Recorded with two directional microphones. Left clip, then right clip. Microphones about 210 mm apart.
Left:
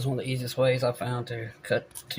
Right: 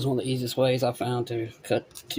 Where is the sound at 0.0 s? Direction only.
55° right (ahead or behind).